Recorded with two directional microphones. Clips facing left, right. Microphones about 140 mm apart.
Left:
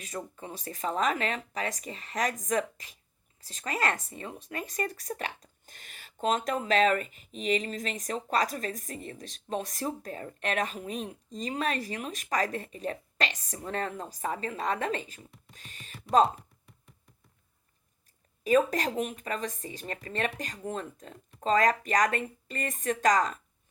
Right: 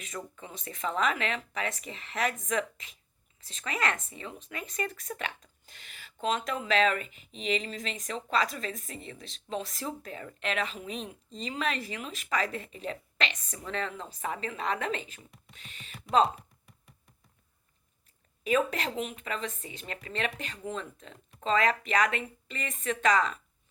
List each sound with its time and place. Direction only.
0.0 s speech: 35° left (ahead or behind)
18.4 s speech: 40° left (ahead or behind)